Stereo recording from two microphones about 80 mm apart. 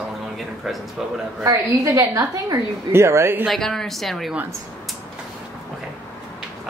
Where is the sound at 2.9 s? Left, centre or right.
Right.